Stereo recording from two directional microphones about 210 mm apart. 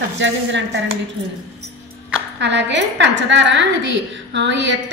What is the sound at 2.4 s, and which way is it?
A woman's voice, 55° right (ahead or behind).